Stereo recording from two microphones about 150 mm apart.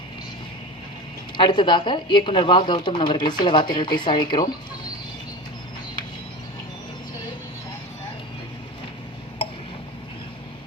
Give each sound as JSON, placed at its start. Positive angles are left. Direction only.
{"t": 1.4, "sound": "speech", "side_deg": 30}